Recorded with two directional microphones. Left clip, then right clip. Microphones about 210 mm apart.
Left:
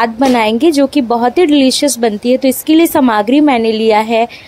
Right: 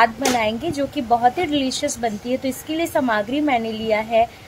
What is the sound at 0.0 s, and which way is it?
A woman's voice, 45° left (ahead or behind).